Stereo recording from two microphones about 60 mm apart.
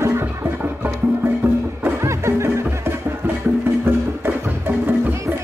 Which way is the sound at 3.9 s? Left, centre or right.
Right.